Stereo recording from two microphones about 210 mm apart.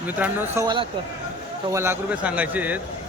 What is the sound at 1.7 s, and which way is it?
Speech, 10° right (ahead or behind).